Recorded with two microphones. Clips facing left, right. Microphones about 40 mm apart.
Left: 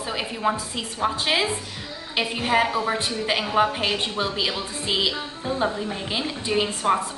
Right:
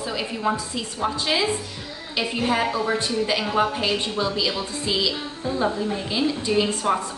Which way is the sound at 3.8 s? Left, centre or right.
Left.